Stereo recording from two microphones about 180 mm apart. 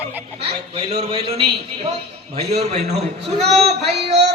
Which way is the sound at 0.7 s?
35° right (ahead or behind).